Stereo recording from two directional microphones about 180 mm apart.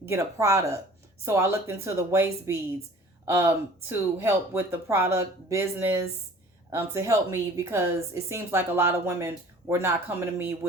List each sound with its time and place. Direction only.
0.0 s a woman's voice: 15° right (ahead or behind)